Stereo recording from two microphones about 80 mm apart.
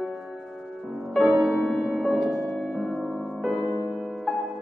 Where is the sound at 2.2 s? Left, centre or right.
Left.